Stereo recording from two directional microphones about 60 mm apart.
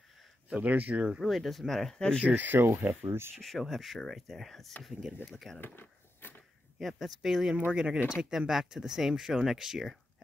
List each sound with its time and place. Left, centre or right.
0.6 s speech: right
1.2 s speech: centre
2.2 s speech: right
3.3 s speech: centre
5.8 s a sound: left
6.8 s speech: centre